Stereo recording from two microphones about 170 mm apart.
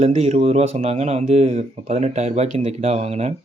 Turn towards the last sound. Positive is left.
turn(degrees=-40)  # may be behind; listen again after turning